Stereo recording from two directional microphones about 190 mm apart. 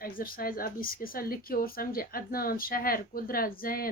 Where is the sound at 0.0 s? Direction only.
50° left (ahead or behind).